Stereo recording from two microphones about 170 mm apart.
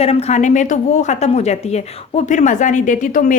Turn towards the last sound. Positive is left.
turn(degrees=50)  # may be behind; listen again after turning